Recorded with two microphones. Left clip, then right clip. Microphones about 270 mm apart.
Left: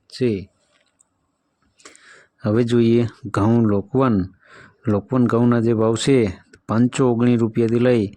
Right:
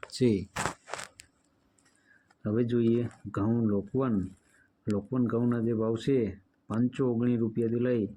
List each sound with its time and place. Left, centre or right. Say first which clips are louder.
0.1 s speech: left 6 dB; centre
2.4 s speech: left 10 dB; left